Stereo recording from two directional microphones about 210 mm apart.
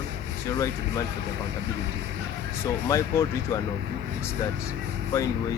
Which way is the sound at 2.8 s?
15° left (ahead or behind).